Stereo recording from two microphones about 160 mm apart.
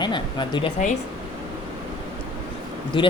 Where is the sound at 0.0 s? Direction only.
30° left (ahead or behind).